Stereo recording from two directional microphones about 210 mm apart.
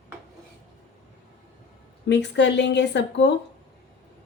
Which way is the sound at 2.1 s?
55° left (ahead or behind).